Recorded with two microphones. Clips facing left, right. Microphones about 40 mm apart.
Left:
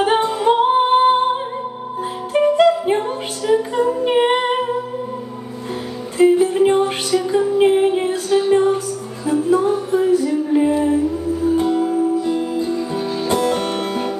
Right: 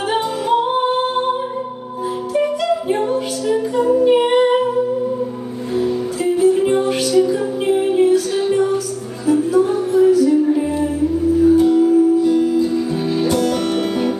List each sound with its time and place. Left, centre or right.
0.0 s music: left
2.3 s music: left
4.0 s humming: left
6.1 s music: left